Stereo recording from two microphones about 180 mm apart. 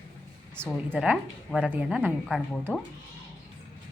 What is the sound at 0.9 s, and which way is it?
Speech, 5° right (ahead or behind).